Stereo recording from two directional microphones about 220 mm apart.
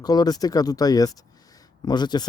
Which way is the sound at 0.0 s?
15° left (ahead or behind).